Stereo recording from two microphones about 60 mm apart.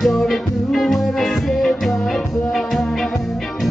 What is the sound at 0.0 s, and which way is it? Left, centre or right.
Music, centre.